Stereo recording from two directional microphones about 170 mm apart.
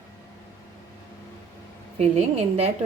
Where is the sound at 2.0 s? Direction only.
35° right (ahead or behind).